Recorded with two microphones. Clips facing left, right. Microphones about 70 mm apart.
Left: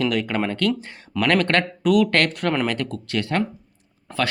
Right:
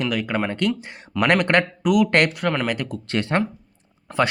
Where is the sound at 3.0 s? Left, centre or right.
Right.